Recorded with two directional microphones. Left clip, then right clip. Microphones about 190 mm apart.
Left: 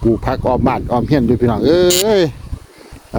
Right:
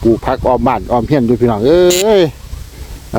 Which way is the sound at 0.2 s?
15° left (ahead or behind).